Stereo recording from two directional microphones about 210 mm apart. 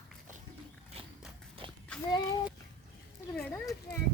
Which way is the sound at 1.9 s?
5° left (ahead or behind).